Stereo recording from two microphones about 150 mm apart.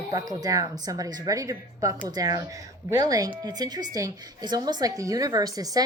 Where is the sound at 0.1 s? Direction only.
25° right (ahead or behind).